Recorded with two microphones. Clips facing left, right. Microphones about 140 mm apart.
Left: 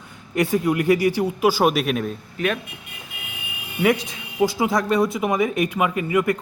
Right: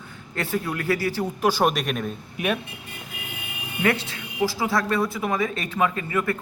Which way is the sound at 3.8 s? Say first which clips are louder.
Left 4 dB; 15° left (ahead or behind).